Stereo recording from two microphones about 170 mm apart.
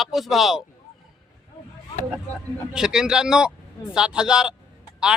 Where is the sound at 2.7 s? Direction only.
5° right (ahead or behind).